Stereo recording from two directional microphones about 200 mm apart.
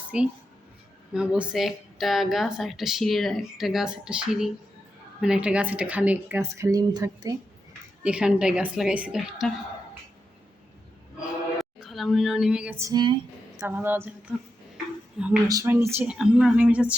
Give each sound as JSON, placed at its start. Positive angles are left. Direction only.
{"t": 0.1, "sound": "a woman's voice", "side_deg": -5}
{"t": 8.0, "sound": "speech", "side_deg": -5}
{"t": 11.2, "sound": "a sound", "side_deg": 0}
{"t": 12.9, "sound": "speech", "side_deg": -20}
{"t": 13.6, "sound": "a woman's voice", "side_deg": -10}
{"t": 15.4, "sound": "a woman's voice", "side_deg": -15}